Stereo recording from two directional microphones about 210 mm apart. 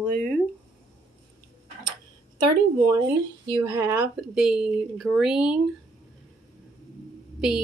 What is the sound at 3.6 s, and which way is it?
Speech, 10° right (ahead or behind).